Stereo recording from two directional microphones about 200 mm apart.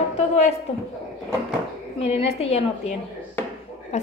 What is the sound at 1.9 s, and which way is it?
A woman's voice, 30° left (ahead or behind).